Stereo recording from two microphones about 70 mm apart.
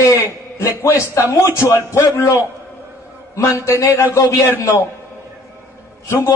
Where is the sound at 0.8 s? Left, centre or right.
Left.